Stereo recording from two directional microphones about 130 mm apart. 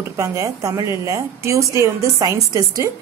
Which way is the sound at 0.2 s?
25° right (ahead or behind).